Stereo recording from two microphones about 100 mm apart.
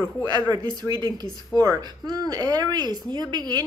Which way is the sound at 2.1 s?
40° right (ahead or behind).